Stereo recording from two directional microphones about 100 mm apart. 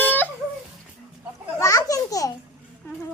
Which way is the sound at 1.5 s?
30° left (ahead or behind).